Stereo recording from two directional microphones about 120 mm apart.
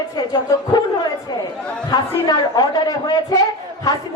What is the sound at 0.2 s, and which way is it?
Speech, 30° left (ahead or behind).